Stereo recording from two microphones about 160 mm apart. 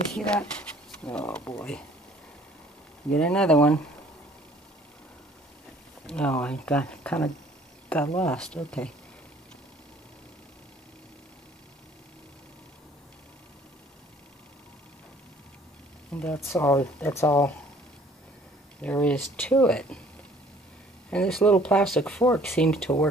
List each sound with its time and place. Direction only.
0.1 s speech: 5° left (ahead or behind)
3.2 s speech: 5° left (ahead or behind)
6.0 s speech: 5° left (ahead or behind)
16.1 s speech: 10° left (ahead or behind)
18.8 s speech: 10° left (ahead or behind)
21.1 s speech: 5° left (ahead or behind)